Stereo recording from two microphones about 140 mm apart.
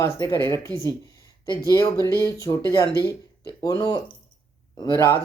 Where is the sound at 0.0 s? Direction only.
25° left (ahead or behind).